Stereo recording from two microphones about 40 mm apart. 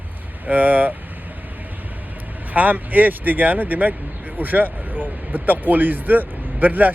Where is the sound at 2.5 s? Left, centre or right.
Right.